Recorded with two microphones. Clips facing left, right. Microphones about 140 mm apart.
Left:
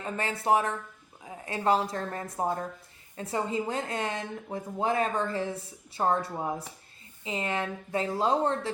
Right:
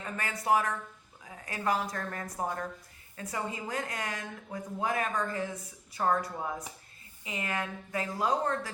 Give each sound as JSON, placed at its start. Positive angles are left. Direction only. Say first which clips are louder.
{"t": 0.0, "sound": "a woman's voice", "louder": "left 4 dB", "side_deg": 25}